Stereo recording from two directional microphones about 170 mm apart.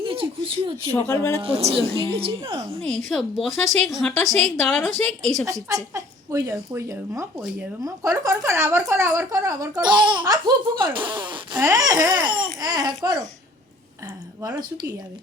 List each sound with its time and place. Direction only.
0.0 s speech: 30° right (ahead or behind)
1.0 s speech: 15° left (ahead or behind)
1.4 s a woman's voice: 35° right (ahead or behind)
3.1 s a woman's voice: centre (ahead or behind)
5.5 s a woman's voice: 20° right (ahead or behind)
14.4 s speech: 20° right (ahead or behind)